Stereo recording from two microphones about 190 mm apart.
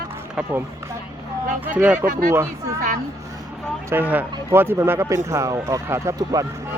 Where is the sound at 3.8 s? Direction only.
10° right (ahead or behind).